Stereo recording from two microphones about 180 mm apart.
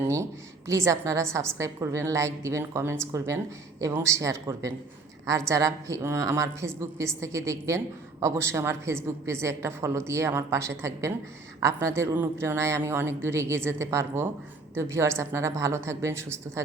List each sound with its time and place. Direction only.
0.7 s a woman's voice: 15° right (ahead or behind)